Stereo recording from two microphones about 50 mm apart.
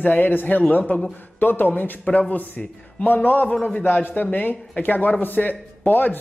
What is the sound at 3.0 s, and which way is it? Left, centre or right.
Speech, left.